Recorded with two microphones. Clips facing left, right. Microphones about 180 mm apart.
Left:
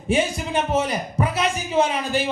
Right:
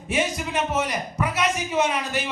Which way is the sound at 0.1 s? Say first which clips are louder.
Left 4 dB; 30° left (ahead or behind).